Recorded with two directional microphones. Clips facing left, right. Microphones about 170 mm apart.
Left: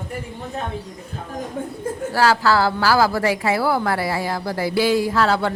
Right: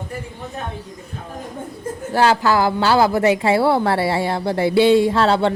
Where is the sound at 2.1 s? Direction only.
20° right (ahead or behind).